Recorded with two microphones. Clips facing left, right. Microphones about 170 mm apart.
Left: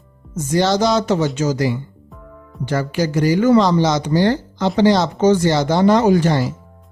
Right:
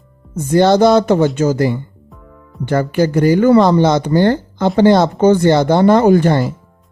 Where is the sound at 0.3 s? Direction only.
55° right (ahead or behind).